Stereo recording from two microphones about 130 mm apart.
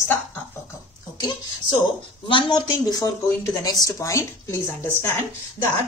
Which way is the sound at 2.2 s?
40° left (ahead or behind).